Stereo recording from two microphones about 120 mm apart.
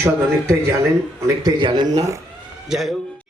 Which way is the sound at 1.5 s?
40° right (ahead or behind).